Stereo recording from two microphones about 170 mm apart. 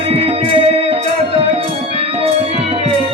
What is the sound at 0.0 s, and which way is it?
Music, 35° right (ahead or behind).